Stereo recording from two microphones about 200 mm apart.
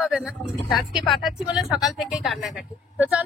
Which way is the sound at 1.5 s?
Centre (ahead or behind).